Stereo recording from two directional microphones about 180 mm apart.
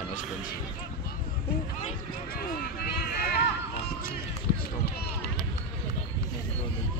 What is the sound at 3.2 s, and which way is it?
Run, 60° left (ahead or behind).